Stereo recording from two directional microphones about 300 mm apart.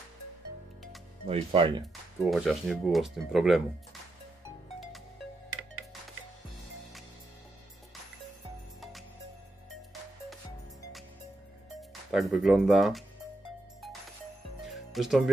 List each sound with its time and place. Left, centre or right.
1.2 s speech: centre
2.3 s speech: centre
11.7 s speech: centre
14.7 s music: centre